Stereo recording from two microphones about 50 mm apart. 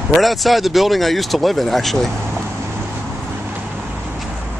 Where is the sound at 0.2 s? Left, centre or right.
Centre.